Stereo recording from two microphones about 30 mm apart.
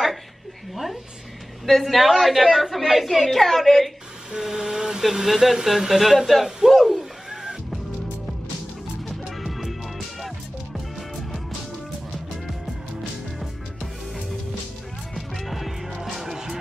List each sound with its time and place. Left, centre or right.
1.7 s a man's voice: centre
3.1 s a man's voice: centre
4.4 s vehicle: centre
5.0 s speech: centre
9.0 s music: centre
15.1 s music: centre
16.3 s music: centre